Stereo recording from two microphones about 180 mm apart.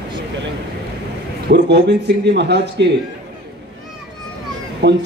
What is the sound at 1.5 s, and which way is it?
A man's voice, 70° right (ahead or behind).